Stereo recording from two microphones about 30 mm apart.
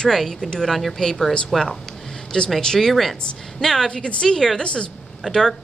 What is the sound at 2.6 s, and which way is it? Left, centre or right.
Speech, left.